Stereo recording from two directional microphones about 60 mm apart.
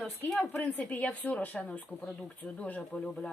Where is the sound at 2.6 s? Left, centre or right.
Centre.